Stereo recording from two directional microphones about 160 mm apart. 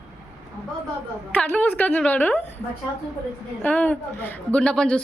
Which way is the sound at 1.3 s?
10° left (ahead or behind).